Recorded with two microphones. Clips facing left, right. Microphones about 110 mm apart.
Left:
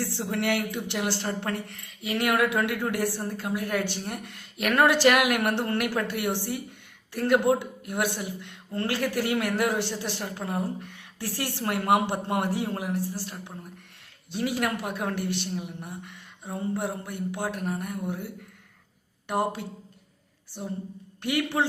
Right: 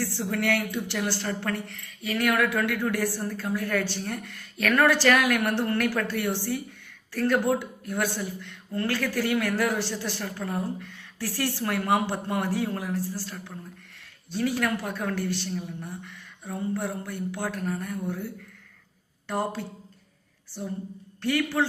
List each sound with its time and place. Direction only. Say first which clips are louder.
0.0 s a woman's voice: right 1 dB; 20° left (ahead or behind)
19.3 s a woman's voice: left 2 dB; 20° left (ahead or behind)